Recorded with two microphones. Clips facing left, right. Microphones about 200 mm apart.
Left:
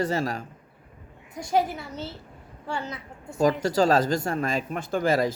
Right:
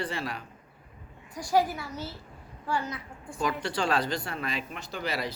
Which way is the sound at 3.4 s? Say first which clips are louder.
Left 8 dB; 40° left (ahead or behind).